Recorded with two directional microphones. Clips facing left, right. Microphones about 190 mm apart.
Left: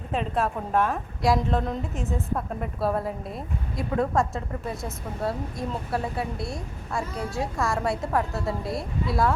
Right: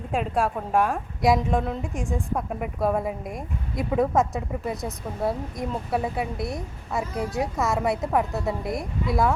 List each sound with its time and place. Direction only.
0.1 s a woman's voice: 10° right (ahead or behind)
2.0 s a woman's voice: 5° left (ahead or behind)
2.5 s a woman's voice: 10° right (ahead or behind)